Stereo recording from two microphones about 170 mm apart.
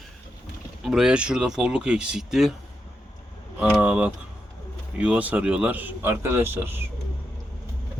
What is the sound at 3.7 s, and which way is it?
Speech, 10° right (ahead or behind).